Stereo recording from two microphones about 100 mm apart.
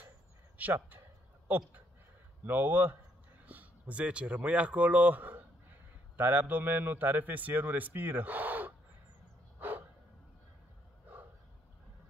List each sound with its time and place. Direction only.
0.6 s speech: 15° right (ahead or behind)
2.4 s a man's voice: 20° right (ahead or behind)
9.6 s a sound: 20° right (ahead or behind)